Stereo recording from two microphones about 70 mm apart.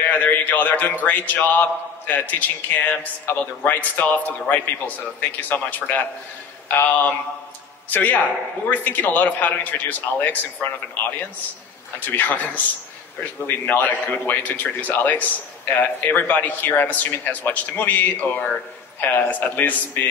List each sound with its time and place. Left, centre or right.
0.0 s mantra: left